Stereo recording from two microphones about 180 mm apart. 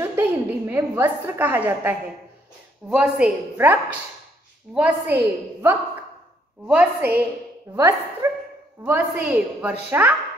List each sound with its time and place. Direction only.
0.0 s a woman's voice: 15° right (ahead or behind)